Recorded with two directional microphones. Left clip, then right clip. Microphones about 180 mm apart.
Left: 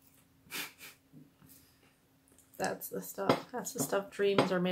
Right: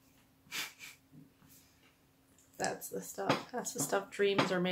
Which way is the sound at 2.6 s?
Centre (ahead or behind).